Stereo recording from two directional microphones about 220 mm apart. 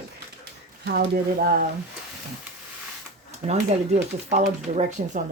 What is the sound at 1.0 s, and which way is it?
Speech, 40° right (ahead or behind).